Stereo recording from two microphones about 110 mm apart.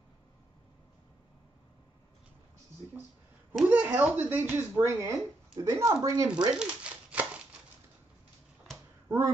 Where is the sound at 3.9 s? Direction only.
15° right (ahead or behind); by 6.3 s 35° right (ahead or behind).